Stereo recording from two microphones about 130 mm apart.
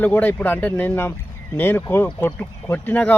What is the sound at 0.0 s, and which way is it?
Speech, 15° left (ahead or behind).